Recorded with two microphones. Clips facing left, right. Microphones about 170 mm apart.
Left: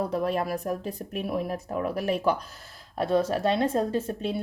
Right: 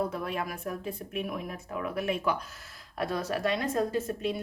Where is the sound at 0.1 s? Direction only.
35° left (ahead or behind).